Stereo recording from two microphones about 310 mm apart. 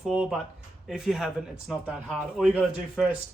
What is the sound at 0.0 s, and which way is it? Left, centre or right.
Speech, centre.